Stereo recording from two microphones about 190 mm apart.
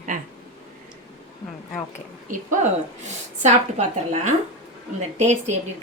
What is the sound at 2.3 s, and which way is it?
A woman's voice, 40° right (ahead or behind).